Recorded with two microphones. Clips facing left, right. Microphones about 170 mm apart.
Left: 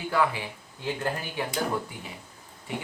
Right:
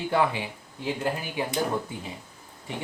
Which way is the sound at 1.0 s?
15° right (ahead or behind).